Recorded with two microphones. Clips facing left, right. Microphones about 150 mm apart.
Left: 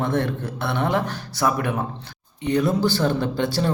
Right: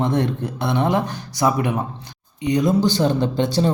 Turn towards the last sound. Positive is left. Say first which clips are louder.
# right 3 dB
turn(degrees=-20)  # may be behind; listen again after turning